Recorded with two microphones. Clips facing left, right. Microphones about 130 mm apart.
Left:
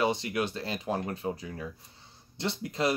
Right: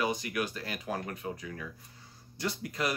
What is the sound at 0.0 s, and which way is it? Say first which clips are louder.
Speech: left 3 dB; 25° left (ahead or behind).